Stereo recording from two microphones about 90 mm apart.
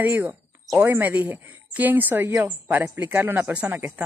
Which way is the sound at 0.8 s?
20° right (ahead or behind).